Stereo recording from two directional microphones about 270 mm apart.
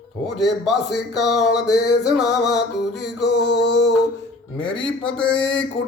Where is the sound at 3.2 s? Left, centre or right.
Left.